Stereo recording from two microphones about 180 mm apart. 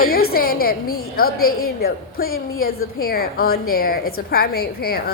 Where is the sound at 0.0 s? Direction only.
55° left (ahead or behind).